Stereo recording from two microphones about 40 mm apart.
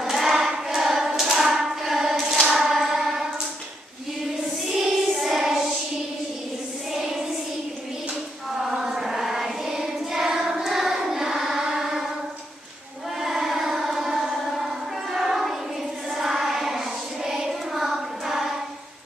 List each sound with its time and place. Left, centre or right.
0.0 s choir: centre
0.8 s hands: centre
2.1 s a sound: centre
4.8 s child singing: centre
6.9 s child singing: centre
8.6 s child singing: centre
10.7 s singing: centre
11.4 s music: centre
13.2 s a sound: centre
16.1 s child singing: centre